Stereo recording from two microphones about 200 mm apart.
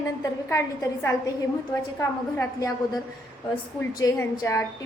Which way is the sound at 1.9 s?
15° left (ahead or behind).